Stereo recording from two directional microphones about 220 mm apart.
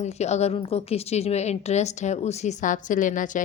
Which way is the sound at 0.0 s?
30° left (ahead or behind).